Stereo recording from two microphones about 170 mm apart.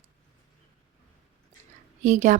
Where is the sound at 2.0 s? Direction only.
45° right (ahead or behind).